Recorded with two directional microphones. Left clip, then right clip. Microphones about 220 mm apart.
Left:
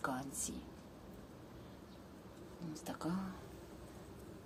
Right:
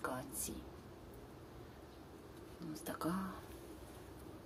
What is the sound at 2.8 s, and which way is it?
Speech, centre (ahead or behind).